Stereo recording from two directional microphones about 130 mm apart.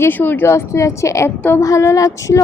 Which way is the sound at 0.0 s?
15° left (ahead or behind).